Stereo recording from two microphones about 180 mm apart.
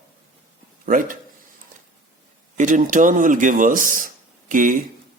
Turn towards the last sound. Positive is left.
turn(degrees=-50)  # may be behind; listen again after turning